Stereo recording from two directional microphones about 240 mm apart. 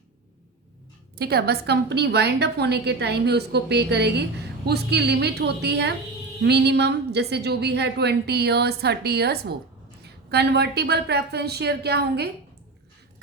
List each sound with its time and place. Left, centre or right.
1.2 s a woman's voice: right